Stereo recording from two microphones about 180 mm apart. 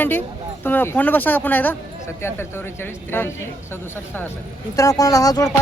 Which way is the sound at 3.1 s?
10° left (ahead or behind).